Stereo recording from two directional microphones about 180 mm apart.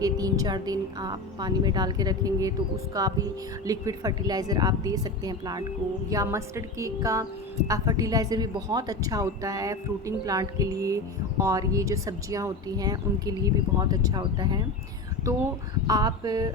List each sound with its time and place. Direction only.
0.0 s speech: 20° right (ahead or behind)
15.9 s speech: 20° right (ahead or behind)